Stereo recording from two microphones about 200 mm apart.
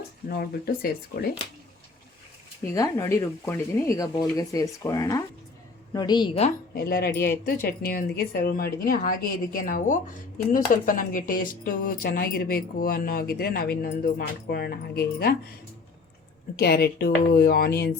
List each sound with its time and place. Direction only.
0.3 s speech: 50° left (ahead or behind)
2.7 s a woman's voice: 15° left (ahead or behind)
6.7 s speech: 50° left (ahead or behind)
16.6 s speech: 50° left (ahead or behind)